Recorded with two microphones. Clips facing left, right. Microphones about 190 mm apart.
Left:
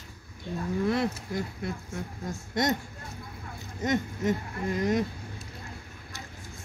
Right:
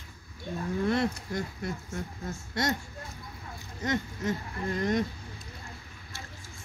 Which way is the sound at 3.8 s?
20° left (ahead or behind).